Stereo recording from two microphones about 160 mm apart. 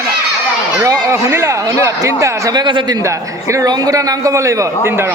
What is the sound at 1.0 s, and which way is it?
Speech, 15° right (ahead or behind).